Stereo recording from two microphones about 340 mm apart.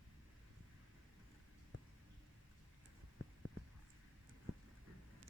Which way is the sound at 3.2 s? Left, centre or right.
Left.